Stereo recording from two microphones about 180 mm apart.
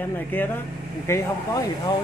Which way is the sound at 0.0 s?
10° left (ahead or behind).